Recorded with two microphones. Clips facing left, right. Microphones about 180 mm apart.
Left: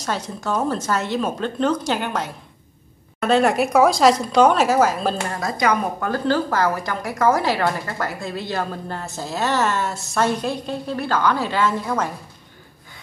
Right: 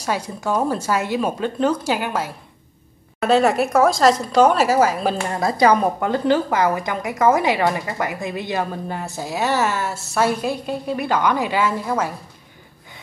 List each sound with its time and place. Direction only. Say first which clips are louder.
0.0 s a woman's voice: right 2 dB; 10° right (ahead or behind)
5.3 s a woman's voice: right 8 dB; 30° right (ahead or behind); by 12.1 s 5° right (ahead or behind)